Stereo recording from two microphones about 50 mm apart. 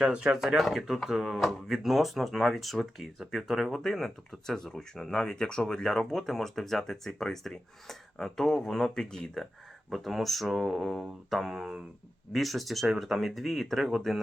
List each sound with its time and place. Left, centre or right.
0.0 s speech: right
0.3 s speech: centre
9.9 s speech: centre